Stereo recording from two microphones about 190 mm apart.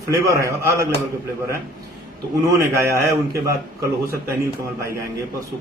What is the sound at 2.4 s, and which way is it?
Speech, 15° right (ahead or behind).